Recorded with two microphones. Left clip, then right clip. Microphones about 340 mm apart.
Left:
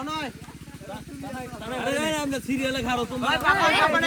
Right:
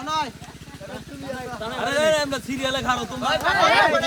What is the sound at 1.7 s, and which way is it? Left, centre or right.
Speech, centre.